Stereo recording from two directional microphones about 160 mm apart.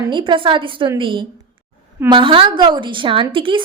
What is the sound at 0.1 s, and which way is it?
A woman's voice, 30° right (ahead or behind).